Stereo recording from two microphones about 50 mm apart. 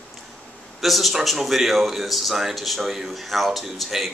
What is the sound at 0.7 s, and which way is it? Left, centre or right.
Speech, centre.